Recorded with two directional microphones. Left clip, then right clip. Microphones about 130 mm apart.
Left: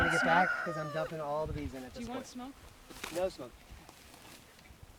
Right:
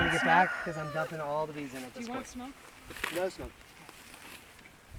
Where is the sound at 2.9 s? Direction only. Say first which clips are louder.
Right 5 dB; 80° left.